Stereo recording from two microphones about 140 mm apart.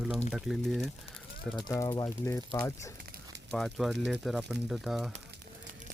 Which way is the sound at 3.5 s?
Centre (ahead or behind).